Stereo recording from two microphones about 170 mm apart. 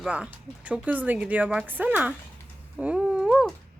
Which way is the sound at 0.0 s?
5° right (ahead or behind).